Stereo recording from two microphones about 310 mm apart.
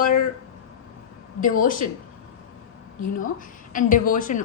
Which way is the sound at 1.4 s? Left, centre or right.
Left.